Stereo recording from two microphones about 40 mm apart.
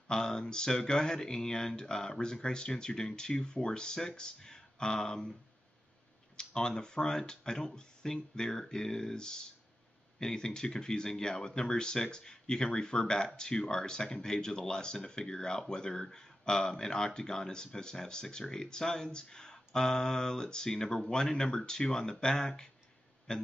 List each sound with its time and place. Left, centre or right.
0.1 s speech: centre
6.3 s speech: centre